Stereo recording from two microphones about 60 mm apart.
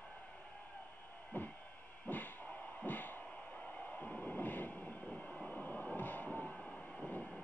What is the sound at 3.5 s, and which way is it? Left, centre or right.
Train, left.